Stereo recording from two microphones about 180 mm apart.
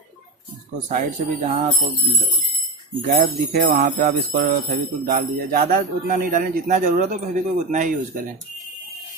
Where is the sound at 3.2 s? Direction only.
50° right (ahead or behind).